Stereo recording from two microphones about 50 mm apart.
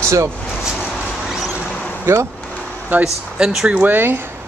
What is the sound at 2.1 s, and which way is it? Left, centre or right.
Speech, right.